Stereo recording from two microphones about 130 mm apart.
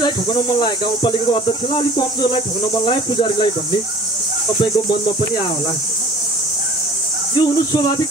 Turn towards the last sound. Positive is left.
turn(degrees=35)  # may be behind; listen again after turning